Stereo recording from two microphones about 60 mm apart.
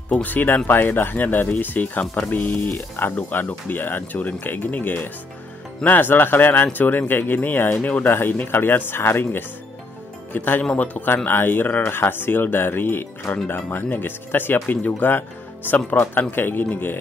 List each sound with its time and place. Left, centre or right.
0.2 s a man's voice: left